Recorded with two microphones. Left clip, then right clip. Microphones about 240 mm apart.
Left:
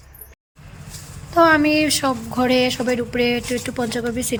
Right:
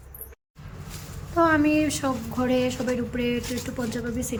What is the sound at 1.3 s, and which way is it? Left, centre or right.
Speech, centre.